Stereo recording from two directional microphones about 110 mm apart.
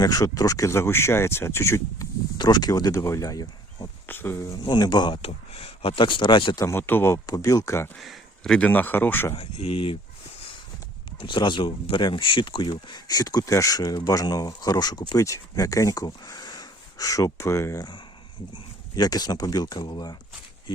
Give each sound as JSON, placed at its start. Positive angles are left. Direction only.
{"t": 0.0, "sound": "speech", "side_deg": 35}
{"t": 2.4, "sound": "speech", "side_deg": 40}
{"t": 4.0, "sound": "speech", "side_deg": 20}
{"t": 4.6, "sound": "speech", "side_deg": 40}
{"t": 5.2, "sound": "speech", "side_deg": 65}
{"t": 6.6, "sound": "speech", "side_deg": 25}
{"t": 7.3, "sound": "speech", "side_deg": 35}
{"t": 7.9, "sound": "a sound", "side_deg": 0}
{"t": 8.5, "sound": "speech", "side_deg": 15}
{"t": 9.3, "sound": "speech", "side_deg": 65}
{"t": 11.2, "sound": "speech", "side_deg": 50}
{"t": 18.5, "sound": "speech", "side_deg": 40}